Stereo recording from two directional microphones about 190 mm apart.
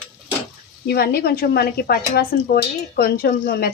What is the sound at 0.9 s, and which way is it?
A woman's voice, 55° left (ahead or behind).